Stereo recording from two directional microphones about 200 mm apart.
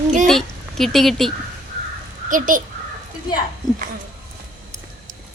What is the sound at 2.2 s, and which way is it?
Speech, 40° right (ahead or behind).